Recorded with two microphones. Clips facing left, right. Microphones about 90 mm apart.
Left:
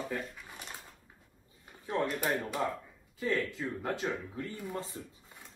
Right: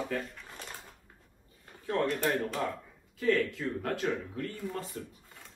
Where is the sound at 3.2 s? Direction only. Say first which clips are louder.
Right 4 dB; 20° left (ahead or behind).